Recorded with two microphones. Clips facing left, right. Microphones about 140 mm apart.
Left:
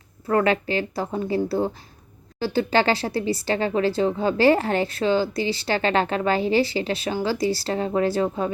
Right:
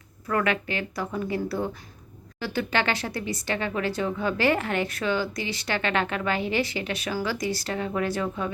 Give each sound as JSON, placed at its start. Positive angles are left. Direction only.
{"t": 0.3, "sound": "speech", "side_deg": 30}